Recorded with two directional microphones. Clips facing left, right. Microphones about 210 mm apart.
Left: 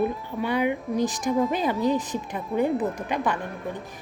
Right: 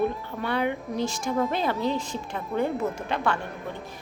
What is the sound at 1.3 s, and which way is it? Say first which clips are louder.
Speech: left 2 dB; centre (ahead or behind).